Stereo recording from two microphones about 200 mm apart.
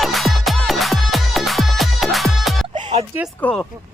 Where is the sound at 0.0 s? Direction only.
Centre (ahead or behind).